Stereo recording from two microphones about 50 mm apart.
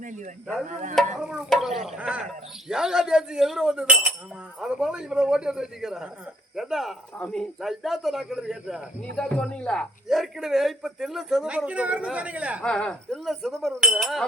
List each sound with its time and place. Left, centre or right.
1.2 s speech: centre
1.5 s a man's voice: centre
7.2 s speech: centre
7.6 s speech: centre
9.1 s speech: centre
10.1 s a man's voice: centre
11.4 s speech: right
12.6 s speech: centre
13.2 s a man's voice: centre